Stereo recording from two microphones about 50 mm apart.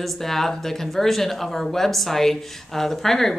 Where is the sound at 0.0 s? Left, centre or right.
Centre.